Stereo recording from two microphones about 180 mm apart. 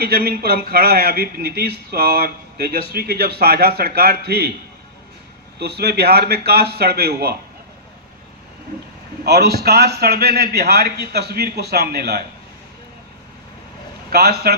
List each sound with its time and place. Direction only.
0.0 s a man's voice: 55° right (ahead or behind)
5.5 s a man's voice: 60° right (ahead or behind)
9.2 s a man's voice: 65° right (ahead or behind)
14.1 s a man's voice: 60° right (ahead or behind)